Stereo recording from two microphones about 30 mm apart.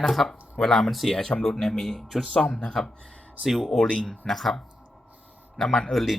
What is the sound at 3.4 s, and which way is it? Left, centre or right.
Speech, centre.